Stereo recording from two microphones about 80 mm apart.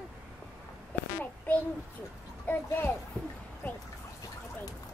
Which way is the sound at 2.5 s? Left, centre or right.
Left.